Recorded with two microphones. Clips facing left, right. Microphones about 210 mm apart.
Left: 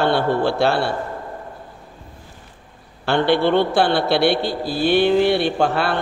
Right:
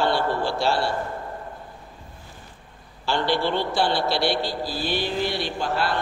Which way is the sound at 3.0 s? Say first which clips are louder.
Left 7 dB; 60° left (ahead or behind).